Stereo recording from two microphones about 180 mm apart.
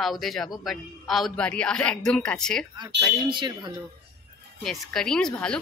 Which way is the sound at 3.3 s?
25° right (ahead or behind).